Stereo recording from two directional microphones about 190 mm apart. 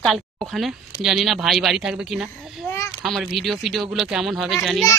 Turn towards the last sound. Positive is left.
turn(degrees=0)  # may be behind; listen again after turning